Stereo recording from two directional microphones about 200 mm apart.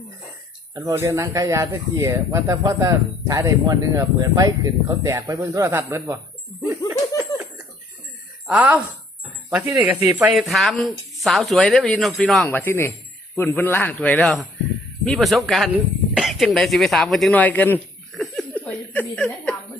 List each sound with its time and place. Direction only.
0.7 s speech: 20° right (ahead or behind)
7.3 s cough: 15° left (ahead or behind)
8.4 s speech: 5° right (ahead or behind)